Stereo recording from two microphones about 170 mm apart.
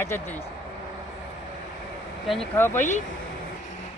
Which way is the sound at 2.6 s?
10° left (ahead or behind).